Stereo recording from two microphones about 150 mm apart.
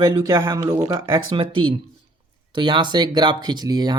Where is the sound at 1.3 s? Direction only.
35° right (ahead or behind).